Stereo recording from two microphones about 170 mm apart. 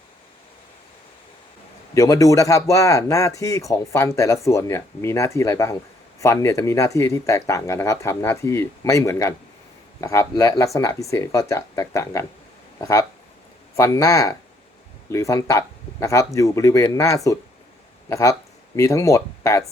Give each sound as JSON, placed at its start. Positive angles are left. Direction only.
{"t": 2.0, "sound": "speech", "side_deg": 20}